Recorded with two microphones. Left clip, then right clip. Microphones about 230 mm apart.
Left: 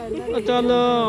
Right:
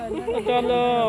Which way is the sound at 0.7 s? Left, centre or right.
Left.